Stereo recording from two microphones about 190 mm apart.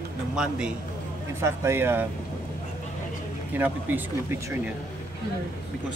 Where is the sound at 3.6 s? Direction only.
10° right (ahead or behind).